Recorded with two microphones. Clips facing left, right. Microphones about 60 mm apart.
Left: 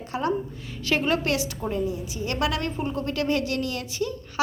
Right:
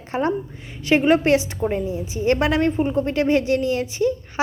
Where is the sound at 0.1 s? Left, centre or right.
Right.